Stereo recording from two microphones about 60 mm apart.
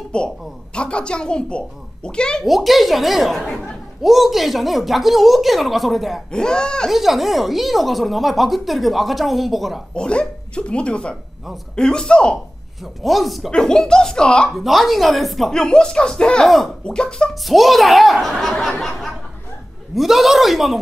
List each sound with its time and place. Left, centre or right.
0.1 s a child's voice: centre
2.4 s speech: centre
6.3 s a child's voice: centre
6.9 s speech: centre
9.9 s a child's voice: centre
12.8 s speech: centre
13.5 s a child's voice: centre
14.5 s speech: centre
15.6 s a child's voice: centre
16.4 s speech: centre
16.8 s a child's voice: centre
17.3 s speech: centre